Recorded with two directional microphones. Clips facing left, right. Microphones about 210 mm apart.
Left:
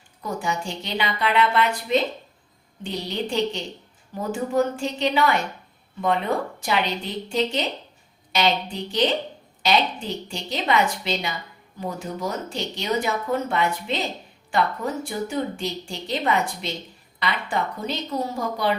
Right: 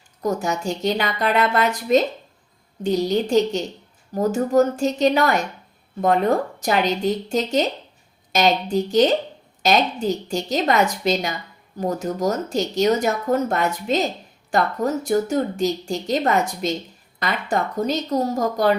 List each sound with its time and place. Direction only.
0.2 s speech: 40° right (ahead or behind)